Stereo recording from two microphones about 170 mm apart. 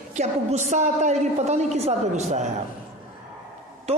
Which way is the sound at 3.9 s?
40° right (ahead or behind).